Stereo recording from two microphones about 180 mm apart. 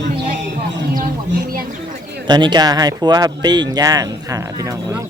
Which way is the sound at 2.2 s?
25° right (ahead or behind).